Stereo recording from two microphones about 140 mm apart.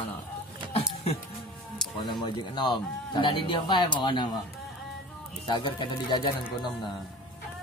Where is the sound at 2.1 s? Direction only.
30° left (ahead or behind).